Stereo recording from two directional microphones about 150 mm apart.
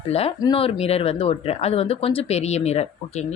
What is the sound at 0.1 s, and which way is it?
Speech, 40° left (ahead or behind).